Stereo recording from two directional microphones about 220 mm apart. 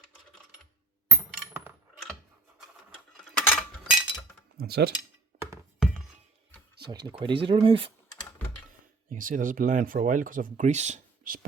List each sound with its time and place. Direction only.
1.3 s coin: 10° right (ahead or behind)
3.3 s a sound: 5° left (ahead or behind)
4.6 s speech: 45° right (ahead or behind)
5.4 s music: 10° right (ahead or behind)
7.0 s speech: 20° right (ahead or behind)
9.0 s speech: 40° right (ahead or behind)